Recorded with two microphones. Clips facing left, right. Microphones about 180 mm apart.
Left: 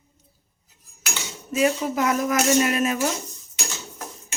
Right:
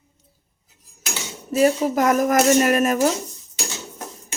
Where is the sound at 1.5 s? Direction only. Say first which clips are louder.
Right 4 dB; 40° right (ahead or behind).